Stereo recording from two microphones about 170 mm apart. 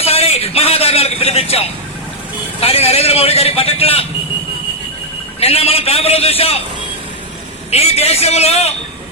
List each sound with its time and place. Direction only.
0.0 s a sound: 35° left (ahead or behind)
2.6 s a man's voice: 35° left (ahead or behind)
5.4 s a man's voice: 35° left (ahead or behind)
7.7 s a man's voice: 35° left (ahead or behind)